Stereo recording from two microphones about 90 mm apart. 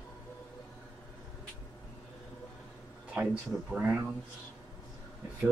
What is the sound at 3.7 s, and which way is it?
Speech, 15° right (ahead or behind).